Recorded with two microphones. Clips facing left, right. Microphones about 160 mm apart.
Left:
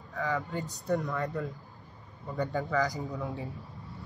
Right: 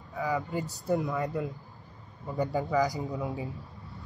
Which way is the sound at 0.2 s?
Centre (ahead or behind).